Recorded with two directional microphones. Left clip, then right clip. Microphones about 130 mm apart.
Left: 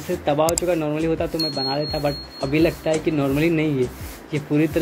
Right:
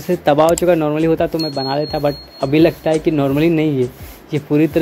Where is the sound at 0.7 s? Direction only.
80° right; by 4.7 s 55° right (ahead or behind).